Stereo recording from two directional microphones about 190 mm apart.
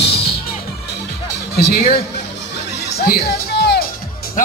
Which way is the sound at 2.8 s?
55° left (ahead or behind).